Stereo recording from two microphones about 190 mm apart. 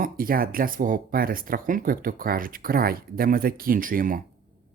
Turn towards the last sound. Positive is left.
turn(degrees=-45)  # may be behind; listen again after turning